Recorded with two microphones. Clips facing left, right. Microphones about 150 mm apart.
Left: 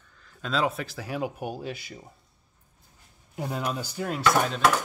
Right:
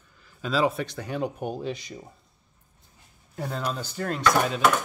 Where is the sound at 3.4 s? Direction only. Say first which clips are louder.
Even; 10° left (ahead or behind).